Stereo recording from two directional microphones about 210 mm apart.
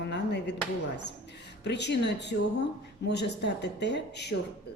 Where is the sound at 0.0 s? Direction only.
55° left (ahead or behind).